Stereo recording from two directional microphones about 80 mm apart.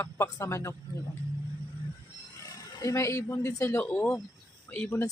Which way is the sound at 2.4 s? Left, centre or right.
Left.